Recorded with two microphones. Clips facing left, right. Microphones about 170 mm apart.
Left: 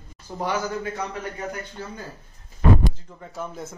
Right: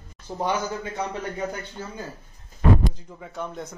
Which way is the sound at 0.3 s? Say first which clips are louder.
Right 1 dB; 25° right (ahead or behind).